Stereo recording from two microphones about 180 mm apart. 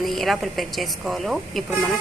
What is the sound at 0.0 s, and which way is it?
Speech, centre (ahead or behind).